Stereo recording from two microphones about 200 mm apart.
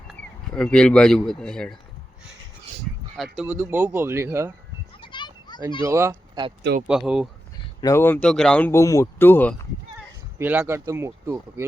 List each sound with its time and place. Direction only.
0.1 s speech: 5° left (ahead or behind)
3.4 s speech: 10° right (ahead or behind)
4.9 s children playing: 25° left (ahead or behind)
5.8 s speech: 15° right (ahead or behind)
6.8 s speech: 5° right (ahead or behind)
7.8 s speech: 15° left (ahead or behind)
10.3 s speech: 10° right (ahead or behind)